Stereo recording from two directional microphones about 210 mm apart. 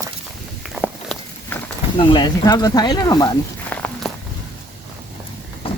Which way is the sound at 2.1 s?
20° left (ahead or behind).